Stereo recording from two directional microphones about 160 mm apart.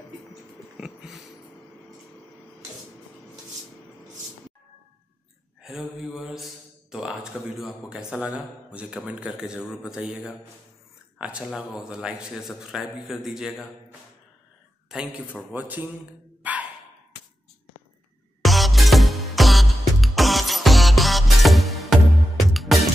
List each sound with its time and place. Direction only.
0.3 s a sound: 5° right (ahead or behind)
5.6 s a man's voice: centre (ahead or behind)
14.9 s a man's voice: 5° right (ahead or behind)
18.4 s music: centre (ahead or behind)